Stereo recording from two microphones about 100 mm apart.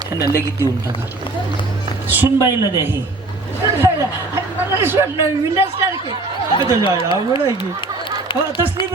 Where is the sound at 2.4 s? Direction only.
30° right (ahead or behind).